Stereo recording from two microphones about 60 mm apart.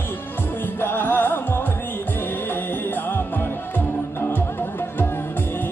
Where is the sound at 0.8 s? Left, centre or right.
Left.